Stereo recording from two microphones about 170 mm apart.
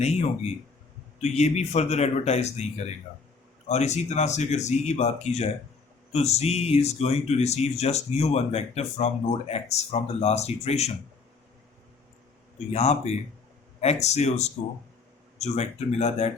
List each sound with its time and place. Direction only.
0.0 s speech: 40° left (ahead or behind)
12.7 s speech: 40° left (ahead or behind)